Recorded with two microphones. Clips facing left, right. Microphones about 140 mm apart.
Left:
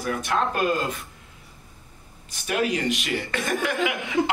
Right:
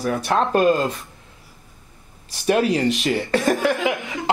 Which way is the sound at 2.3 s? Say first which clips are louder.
Right 6 dB; 35° right (ahead or behind).